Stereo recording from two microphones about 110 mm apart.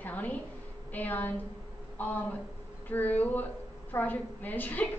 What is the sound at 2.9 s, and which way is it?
A woman's voice, 15° left (ahead or behind).